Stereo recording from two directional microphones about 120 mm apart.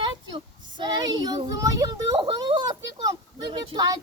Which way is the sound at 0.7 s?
35° right (ahead or behind).